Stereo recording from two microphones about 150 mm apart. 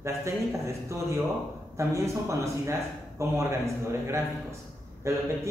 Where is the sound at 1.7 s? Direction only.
20° right (ahead or behind).